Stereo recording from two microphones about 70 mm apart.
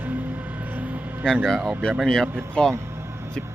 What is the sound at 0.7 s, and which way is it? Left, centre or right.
Vehicle, right.